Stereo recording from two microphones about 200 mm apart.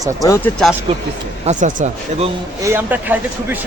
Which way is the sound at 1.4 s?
35° right (ahead or behind).